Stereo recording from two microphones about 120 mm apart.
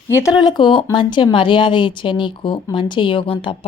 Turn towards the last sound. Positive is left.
turn(degrees=45)  # may be behind; listen again after turning